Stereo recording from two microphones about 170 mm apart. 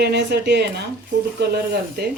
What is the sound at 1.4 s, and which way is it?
Speech, 70° right (ahead or behind).